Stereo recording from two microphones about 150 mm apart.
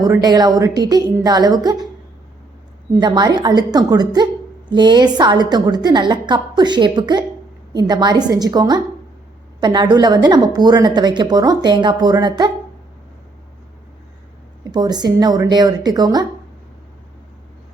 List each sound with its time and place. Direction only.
0.0 s speech: 25° right (ahead or behind)
3.0 s speech: 30° right (ahead or behind)
14.6 s speech: 25° right (ahead or behind)